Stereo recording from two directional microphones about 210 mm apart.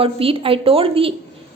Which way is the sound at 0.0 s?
25° right (ahead or behind).